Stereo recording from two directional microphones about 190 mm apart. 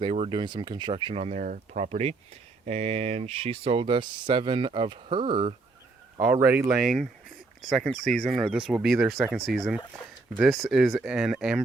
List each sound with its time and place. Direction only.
0.0 s speech: 30° right (ahead or behind)
6.1 s speech: 15° right (ahead or behind)